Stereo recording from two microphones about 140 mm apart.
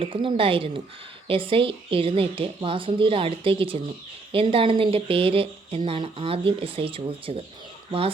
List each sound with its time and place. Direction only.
0.0 s speech: 40° right (ahead or behind)